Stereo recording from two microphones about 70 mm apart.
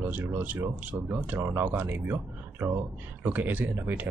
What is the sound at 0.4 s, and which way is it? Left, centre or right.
Speech, right.